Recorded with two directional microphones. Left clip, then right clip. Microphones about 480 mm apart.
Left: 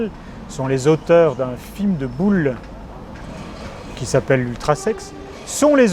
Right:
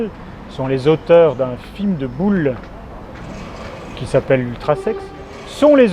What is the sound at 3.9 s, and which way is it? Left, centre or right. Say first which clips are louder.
Speech: right 2 dB; left.